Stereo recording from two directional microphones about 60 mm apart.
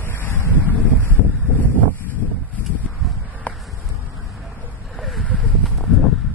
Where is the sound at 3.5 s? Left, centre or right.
Centre.